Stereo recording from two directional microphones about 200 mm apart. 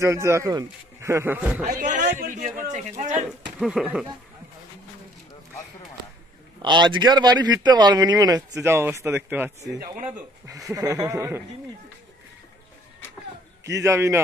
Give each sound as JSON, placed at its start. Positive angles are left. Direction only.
{"t": 0.0, "sound": "speech", "side_deg": -15}
{"t": 1.7, "sound": "speech", "side_deg": -40}
{"t": 3.5, "sound": "speech", "side_deg": 0}
{"t": 6.6, "sound": "speech", "side_deg": -20}
{"t": 9.6, "sound": "speech", "side_deg": -40}
{"t": 10.7, "sound": "speech", "side_deg": -15}
{"t": 13.7, "sound": "speech", "side_deg": -15}